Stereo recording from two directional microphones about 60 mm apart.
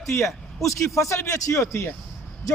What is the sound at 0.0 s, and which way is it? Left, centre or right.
A man's voice, left.